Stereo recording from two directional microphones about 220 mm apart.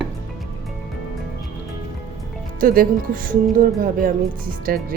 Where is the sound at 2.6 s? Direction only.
40° right (ahead or behind).